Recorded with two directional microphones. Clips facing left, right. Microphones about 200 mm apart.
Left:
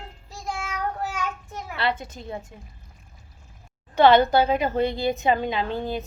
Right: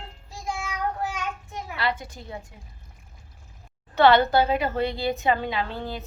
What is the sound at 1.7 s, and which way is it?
Speech, 25° left (ahead or behind).